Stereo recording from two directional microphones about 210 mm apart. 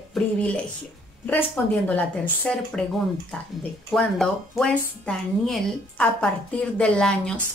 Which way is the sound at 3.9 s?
5° left (ahead or behind).